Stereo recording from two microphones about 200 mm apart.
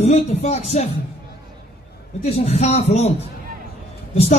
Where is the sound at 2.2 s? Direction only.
30° left (ahead or behind).